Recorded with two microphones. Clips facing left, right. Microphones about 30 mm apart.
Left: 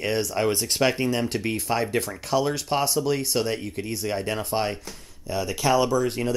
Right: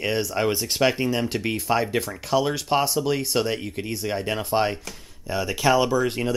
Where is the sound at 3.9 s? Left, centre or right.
Centre.